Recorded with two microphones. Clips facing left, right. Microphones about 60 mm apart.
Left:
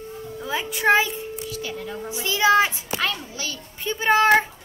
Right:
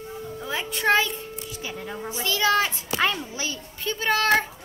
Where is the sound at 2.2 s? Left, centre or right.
Centre.